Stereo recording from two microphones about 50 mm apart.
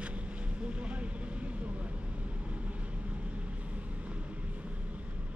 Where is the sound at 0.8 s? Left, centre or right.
Right.